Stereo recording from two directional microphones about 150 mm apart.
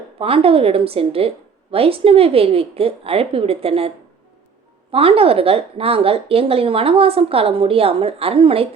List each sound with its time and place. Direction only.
0.2 s speech: 40° right (ahead or behind)